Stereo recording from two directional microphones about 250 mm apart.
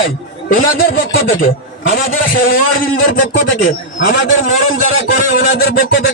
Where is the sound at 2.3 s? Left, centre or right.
Left.